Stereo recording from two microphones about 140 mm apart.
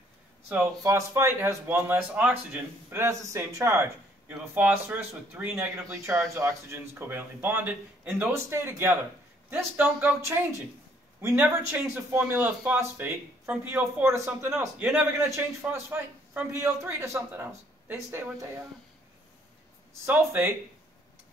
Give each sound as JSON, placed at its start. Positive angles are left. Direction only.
{"t": 0.8, "sound": "a man's voice", "side_deg": -20}
{"t": 11.1, "sound": "a man's voice", "side_deg": -15}
{"t": 20.1, "sound": "a man's voice", "side_deg": -15}